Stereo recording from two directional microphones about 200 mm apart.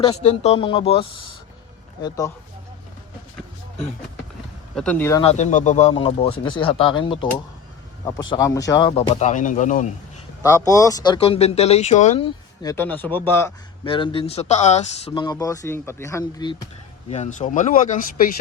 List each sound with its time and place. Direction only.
0.0 s speech: 30° left (ahead or behind)
4.7 s speech: 5° left (ahead or behind)
5.2 s speech: 35° left (ahead or behind)
5.9 s speech: 25° left (ahead or behind)
8.9 s speech: 30° left (ahead or behind)
10.4 s speech: 15° left (ahead or behind); by 12.2 s 35° left (ahead or behind)
12.2 s speech: 15° left (ahead or behind)
13.8 s speech: 25° left (ahead or behind)
17.1 s speech: 35° left (ahead or behind)